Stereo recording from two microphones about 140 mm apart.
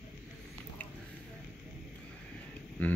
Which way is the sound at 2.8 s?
10° left (ahead or behind).